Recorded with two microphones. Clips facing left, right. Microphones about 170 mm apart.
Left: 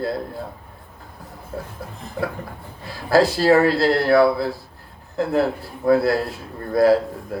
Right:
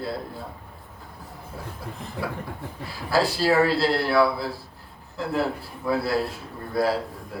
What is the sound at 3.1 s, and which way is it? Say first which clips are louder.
Speech: left 6 dB; 45° left (ahead or behind).